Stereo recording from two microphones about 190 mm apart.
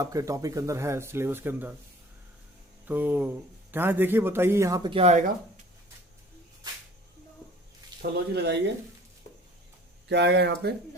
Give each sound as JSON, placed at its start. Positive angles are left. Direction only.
{"t": 0.0, "sound": "a man's voice", "side_deg": -15}
{"t": 2.8, "sound": "a man's voice", "side_deg": -10}
{"t": 8.3, "sound": "speech", "side_deg": -60}
{"t": 10.1, "sound": "speech", "side_deg": -65}